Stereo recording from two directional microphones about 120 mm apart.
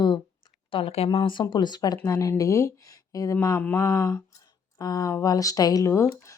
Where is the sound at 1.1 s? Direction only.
45° left (ahead or behind).